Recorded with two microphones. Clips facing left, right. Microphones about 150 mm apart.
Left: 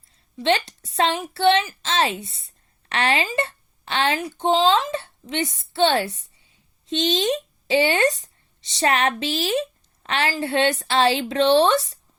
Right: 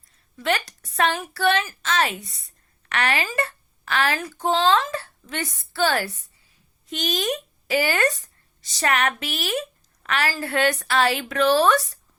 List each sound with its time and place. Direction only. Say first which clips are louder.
0.3 s speech: left 4 dB; 25° left (ahead or behind)